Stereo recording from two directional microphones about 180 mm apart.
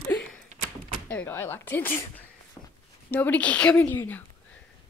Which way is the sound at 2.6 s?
20° left (ahead or behind).